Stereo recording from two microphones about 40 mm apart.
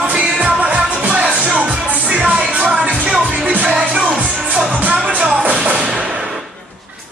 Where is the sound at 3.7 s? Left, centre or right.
Centre.